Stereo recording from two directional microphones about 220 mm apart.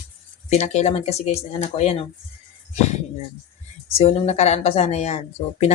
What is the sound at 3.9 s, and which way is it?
Speech, 25° left (ahead or behind).